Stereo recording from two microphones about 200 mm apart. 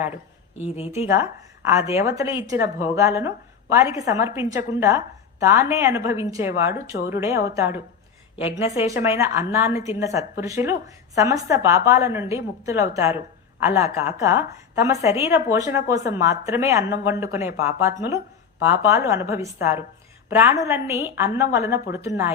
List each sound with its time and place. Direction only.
0.6 s a woman's voice: 30° left (ahead or behind)
1.0 s a woman's voice: 10° right (ahead or behind)